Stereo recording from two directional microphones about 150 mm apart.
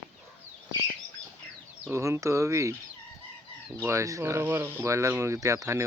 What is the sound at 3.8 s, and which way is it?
Speech, 20° right (ahead or behind).